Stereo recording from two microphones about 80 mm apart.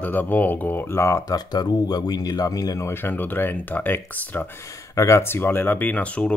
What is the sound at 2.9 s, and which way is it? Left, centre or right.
Speech, left.